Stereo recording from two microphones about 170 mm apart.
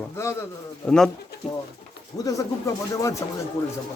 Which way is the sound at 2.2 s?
20° left (ahead or behind).